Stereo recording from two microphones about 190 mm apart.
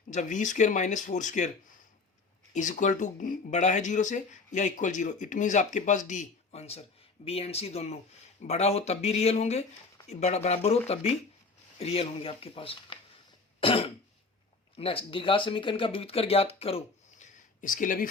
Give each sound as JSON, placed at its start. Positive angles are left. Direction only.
{"t": 0.1, "sound": "speech", "side_deg": 40}
{"t": 2.5, "sound": "speech", "side_deg": 40}
{"t": 17.6, "sound": "speech", "side_deg": 45}